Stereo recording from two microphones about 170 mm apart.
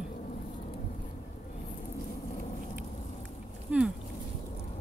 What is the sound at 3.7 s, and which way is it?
Dog, 5° right (ahead or behind).